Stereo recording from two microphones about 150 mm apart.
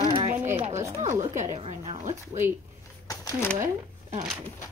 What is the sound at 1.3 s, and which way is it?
Speech, 50° right (ahead or behind).